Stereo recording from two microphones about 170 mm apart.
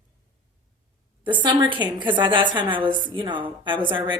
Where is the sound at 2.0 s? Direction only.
30° right (ahead or behind).